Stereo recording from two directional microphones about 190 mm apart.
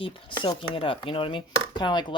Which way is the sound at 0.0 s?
30° left (ahead or behind).